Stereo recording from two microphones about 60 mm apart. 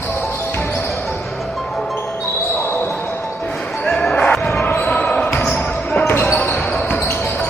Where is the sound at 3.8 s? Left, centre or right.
Centre.